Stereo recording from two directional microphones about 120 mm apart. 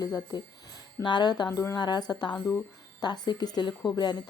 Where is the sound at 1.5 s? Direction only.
25° left (ahead or behind).